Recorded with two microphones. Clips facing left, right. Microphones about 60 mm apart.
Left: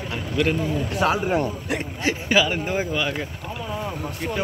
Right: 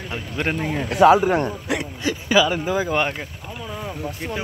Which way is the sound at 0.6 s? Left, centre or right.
Right.